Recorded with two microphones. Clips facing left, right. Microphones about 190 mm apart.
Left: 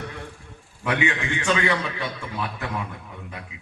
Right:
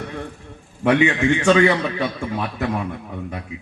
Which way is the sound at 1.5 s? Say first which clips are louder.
Right 6 dB; 40° right (ahead or behind).